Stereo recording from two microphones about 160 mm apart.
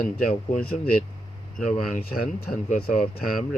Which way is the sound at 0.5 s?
60° left (ahead or behind).